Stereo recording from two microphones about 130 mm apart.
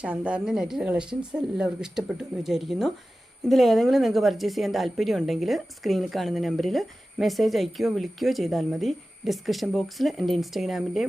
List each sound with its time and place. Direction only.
0.0 s a woman's voice: 10° right (ahead or behind)